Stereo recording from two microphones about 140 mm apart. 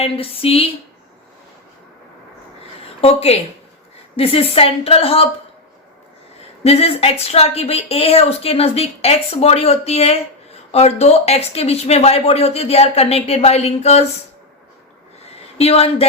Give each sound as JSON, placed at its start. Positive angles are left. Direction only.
{"t": 0.0, "sound": "a woman's voice", "side_deg": 45}
{"t": 3.0, "sound": "a woman's voice", "side_deg": 45}
{"t": 6.7, "sound": "a woman's voice", "side_deg": 45}
{"t": 15.2, "sound": "a sound", "side_deg": 45}